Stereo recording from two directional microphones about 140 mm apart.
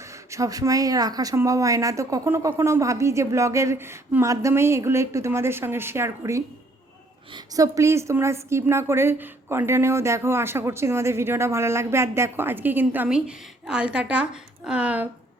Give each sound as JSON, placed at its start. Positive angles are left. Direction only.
{"t": 0.0, "sound": "a woman's voice", "side_deg": -20}